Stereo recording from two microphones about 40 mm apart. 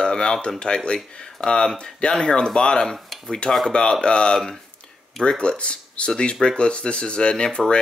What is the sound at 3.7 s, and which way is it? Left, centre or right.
Speech, left.